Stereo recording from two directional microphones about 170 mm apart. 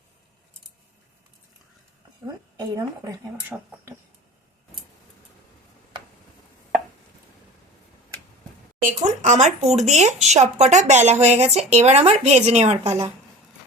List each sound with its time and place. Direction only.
2.2 s a woman's voice: 20° right (ahead or behind)
3.5 s speech: centre (ahead or behind)
8.8 s speech: 45° right (ahead or behind)